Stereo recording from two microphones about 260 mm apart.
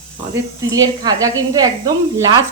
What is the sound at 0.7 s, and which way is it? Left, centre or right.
Speech, centre.